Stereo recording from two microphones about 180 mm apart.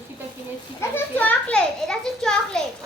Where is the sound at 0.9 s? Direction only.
10° left (ahead or behind).